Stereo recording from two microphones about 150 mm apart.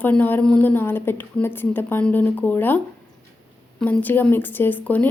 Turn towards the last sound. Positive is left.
turn(degrees=10)  # may be behind; listen again after turning